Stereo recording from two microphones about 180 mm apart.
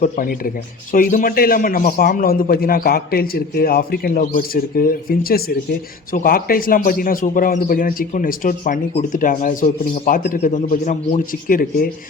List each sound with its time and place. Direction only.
0.0 s a man's voice: 50° left (ahead or behind)